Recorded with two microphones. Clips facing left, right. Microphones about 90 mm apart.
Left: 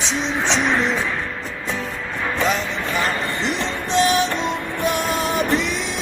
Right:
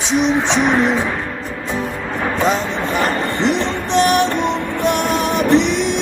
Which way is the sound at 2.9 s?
65° right (ahead or behind).